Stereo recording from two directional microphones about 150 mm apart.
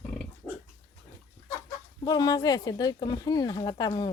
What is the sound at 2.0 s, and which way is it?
Speech, 30° left (ahead or behind).